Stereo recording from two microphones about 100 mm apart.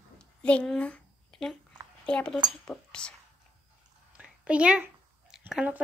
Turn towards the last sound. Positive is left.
turn(degrees=-10)  # may be behind; listen again after turning